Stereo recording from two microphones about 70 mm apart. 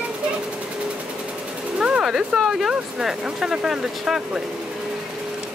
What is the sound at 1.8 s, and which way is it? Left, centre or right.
Speech, centre.